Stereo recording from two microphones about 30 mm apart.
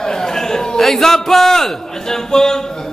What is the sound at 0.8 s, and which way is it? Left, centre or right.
A man's voice, centre.